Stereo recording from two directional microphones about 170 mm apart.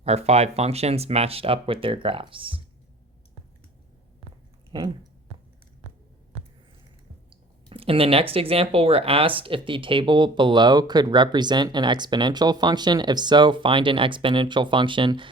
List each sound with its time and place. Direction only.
0.0 s speech: 40° right (ahead or behind)
7.3 s speech: 30° right (ahead or behind)